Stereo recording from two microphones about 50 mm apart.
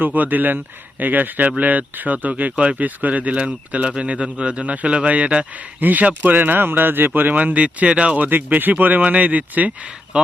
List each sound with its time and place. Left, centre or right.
0.0 s speech: right
8.3 s speech: right